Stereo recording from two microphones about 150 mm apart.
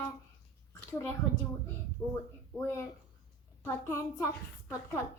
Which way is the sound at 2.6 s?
15° left (ahead or behind).